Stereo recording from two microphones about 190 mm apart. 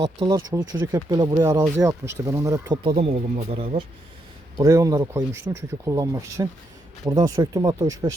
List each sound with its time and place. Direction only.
0.0 s speech: 25° right (ahead or behind)
3.0 s speech: 35° right (ahead or behind)
4.5 s speech: 15° right (ahead or behind)